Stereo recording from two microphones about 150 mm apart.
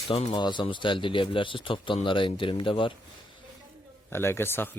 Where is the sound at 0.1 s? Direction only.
40° left (ahead or behind).